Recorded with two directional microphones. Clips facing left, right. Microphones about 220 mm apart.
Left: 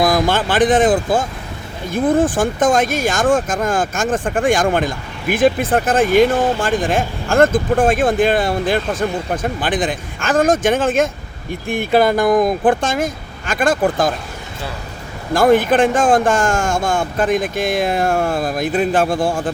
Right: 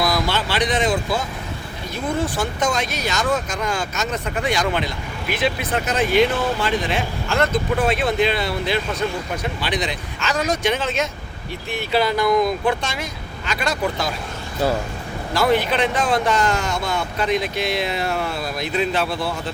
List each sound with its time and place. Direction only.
0.0 s speech: 50° left (ahead or behind)
15.3 s speech: 50° left (ahead or behind)